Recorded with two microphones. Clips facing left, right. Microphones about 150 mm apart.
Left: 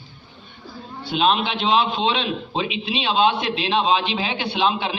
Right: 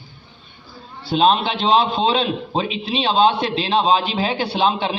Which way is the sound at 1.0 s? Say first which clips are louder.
Right 4 dB; 35° right (ahead or behind).